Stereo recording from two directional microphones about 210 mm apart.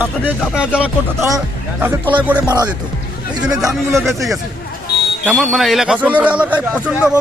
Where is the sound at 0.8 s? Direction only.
10° right (ahead or behind).